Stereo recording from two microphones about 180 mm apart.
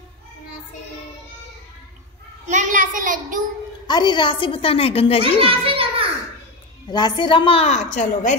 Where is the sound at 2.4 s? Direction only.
45° right (ahead or behind).